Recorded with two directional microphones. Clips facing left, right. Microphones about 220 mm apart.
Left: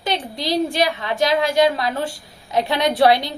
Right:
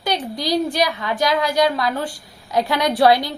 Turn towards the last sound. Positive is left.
turn(degrees=20)  # may be behind; listen again after turning